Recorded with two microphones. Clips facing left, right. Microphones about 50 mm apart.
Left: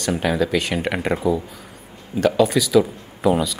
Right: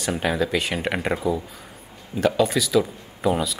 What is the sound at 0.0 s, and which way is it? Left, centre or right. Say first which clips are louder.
Speech: left 3 dB; centre.